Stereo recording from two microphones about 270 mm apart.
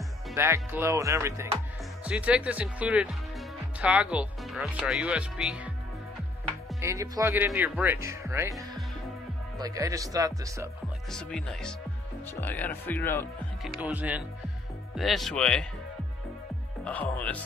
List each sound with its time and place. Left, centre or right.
0.3 s speech: centre
6.8 s speech: centre
11.1 s speech: centre
13.7 s speech: centre
16.8 s speech: centre